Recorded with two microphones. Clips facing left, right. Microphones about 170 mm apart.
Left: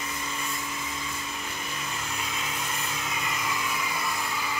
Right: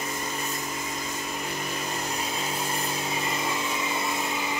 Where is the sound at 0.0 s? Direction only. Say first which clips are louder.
Right 3 dB; 40° right (ahead or behind).